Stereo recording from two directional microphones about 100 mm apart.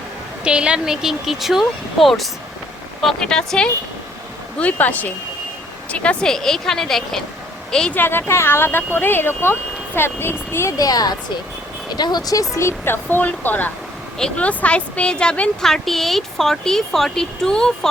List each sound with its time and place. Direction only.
0.4 s a woman's voice: 10° right (ahead or behind); by 7.9 s 5° left (ahead or behind)
7.9 s a woman's voice: 20° left (ahead or behind)